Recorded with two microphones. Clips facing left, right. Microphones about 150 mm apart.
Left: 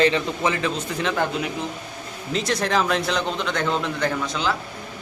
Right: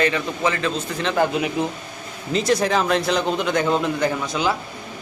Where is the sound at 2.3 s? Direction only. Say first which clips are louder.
Right 3 dB; 5° right (ahead or behind).